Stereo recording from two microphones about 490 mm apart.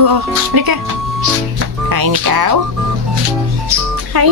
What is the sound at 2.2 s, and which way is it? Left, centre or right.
Speech, right.